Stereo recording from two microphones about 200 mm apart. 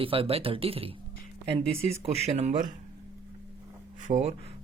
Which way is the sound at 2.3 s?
35° right (ahead or behind).